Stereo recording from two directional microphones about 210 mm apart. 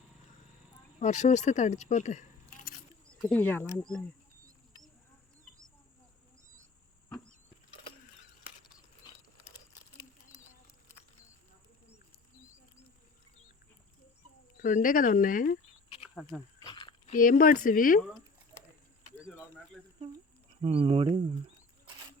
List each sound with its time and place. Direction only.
0.9 s speech: 35° left (ahead or behind)
3.1 s speech: 5° left (ahead or behind)
14.6 s speech: 40° left (ahead or behind)
16.0 s speech: centre (ahead or behind)
16.6 s a sound: 20° left (ahead or behind)
17.1 s speech: 40° left (ahead or behind)
19.8 s a sound: centre (ahead or behind)
20.6 s speech: 25° right (ahead or behind)